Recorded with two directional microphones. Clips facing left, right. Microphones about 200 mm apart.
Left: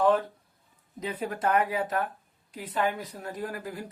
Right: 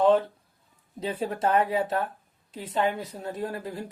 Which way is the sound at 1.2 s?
25° right (ahead or behind).